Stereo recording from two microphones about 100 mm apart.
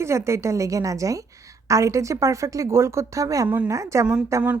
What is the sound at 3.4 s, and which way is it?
Speech, 15° right (ahead or behind).